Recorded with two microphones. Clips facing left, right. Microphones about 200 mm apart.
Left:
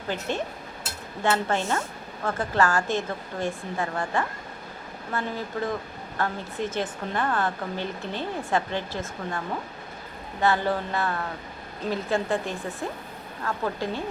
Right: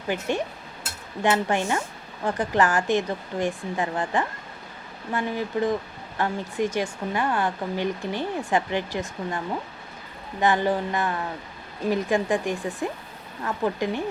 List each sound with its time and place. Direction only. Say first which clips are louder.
0.1 s speech: right 3 dB; 15° right (ahead or behind)
10.4 s speech: right 2 dB; 15° right (ahead or behind)